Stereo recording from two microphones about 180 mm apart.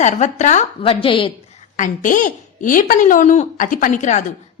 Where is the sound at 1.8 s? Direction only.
45° left (ahead or behind).